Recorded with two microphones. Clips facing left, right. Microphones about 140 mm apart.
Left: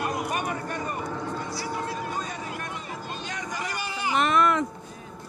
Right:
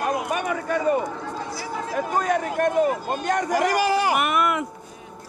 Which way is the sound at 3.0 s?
50° right (ahead or behind).